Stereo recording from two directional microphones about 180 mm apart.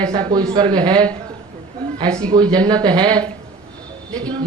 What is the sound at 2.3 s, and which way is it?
Speech, 20° right (ahead or behind).